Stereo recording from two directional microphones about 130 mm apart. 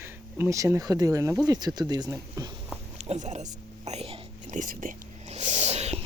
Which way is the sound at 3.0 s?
60° right (ahead or behind).